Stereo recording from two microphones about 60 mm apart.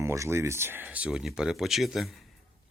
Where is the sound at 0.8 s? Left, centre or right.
Right.